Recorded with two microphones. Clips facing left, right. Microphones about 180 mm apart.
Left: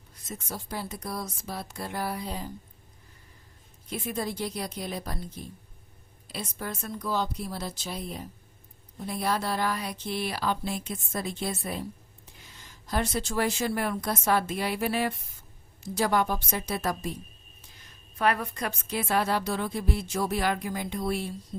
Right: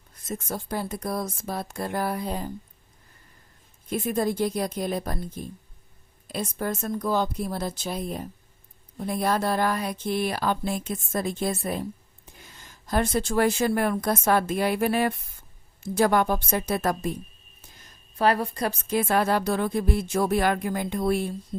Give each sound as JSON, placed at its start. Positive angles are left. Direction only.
{"t": 0.3, "sound": "a woman's voice", "side_deg": -50}
{"t": 3.8, "sound": "a woman's voice", "side_deg": -50}
{"t": 18.2, "sound": "a woman's voice", "side_deg": -30}